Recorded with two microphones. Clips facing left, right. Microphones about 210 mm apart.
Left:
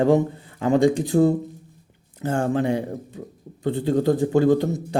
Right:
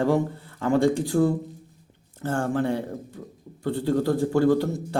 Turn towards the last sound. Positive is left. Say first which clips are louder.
# left 3 dB
turn(degrees=20)  # may be behind; listen again after turning